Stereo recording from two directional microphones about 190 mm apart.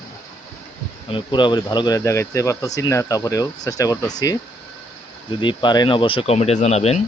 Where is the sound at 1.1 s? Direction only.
25° left (ahead or behind).